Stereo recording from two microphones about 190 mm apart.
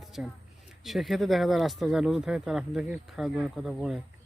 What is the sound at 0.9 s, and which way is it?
Speech, centre (ahead or behind).